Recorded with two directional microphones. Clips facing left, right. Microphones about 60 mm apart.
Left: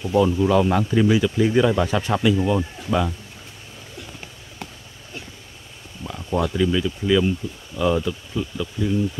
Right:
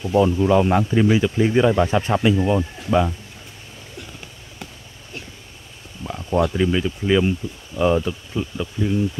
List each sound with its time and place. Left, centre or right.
0.2 s speech: centre
6.0 s speech: right